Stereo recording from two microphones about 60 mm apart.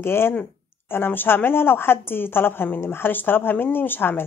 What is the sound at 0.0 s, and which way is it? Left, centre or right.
Speech, left.